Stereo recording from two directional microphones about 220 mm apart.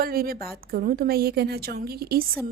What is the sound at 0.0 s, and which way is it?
A woman's voice, 40° right (ahead or behind).